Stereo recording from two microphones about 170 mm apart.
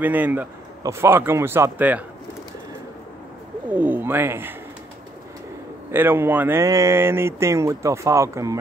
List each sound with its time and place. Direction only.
0.0 s speech: 10° right (ahead or behind)
3.7 s speech: 10° right (ahead or behind)
5.9 s speech: 15° right (ahead or behind)